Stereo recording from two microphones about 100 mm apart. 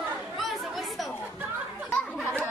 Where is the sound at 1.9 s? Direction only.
15° left (ahead or behind).